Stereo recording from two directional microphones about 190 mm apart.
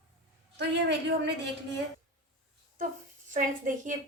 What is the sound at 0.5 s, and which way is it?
Speech, 65° right (ahead or behind).